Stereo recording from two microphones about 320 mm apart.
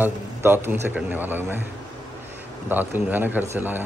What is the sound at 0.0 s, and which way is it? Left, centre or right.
A man's voice, centre.